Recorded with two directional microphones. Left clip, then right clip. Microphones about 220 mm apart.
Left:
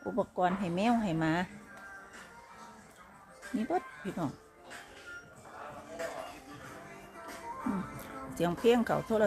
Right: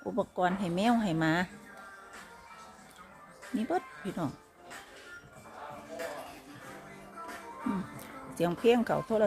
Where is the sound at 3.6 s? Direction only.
5° right (ahead or behind).